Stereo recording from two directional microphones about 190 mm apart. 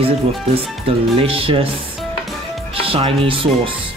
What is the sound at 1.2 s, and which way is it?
Speech, 30° right (ahead or behind).